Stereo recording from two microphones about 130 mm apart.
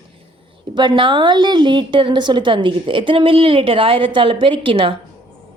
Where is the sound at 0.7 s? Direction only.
40° right (ahead or behind).